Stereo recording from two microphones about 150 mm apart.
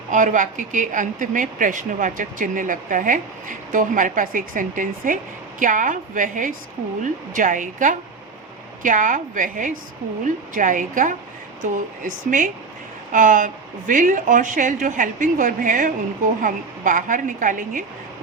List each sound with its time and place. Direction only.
0.1 s speech: 60° right (ahead or behind)